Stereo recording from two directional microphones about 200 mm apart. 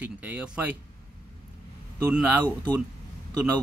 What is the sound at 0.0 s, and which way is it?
Speech, 5° right (ahead or behind).